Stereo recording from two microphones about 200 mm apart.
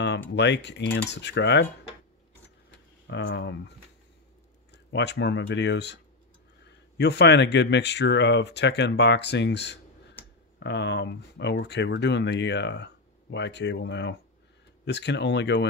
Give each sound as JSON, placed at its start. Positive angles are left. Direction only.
{"t": 0.4, "sound": "speech", "side_deg": 60}
{"t": 3.1, "sound": "speech", "side_deg": 60}
{"t": 4.9, "sound": "speech", "side_deg": 60}
{"t": 7.0, "sound": "speech", "side_deg": 60}